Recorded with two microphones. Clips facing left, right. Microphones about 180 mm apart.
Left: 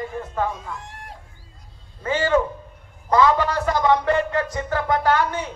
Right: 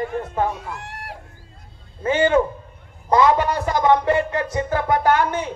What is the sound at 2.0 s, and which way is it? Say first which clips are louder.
Speech: right 3 dB; 20° right (ahead or behind).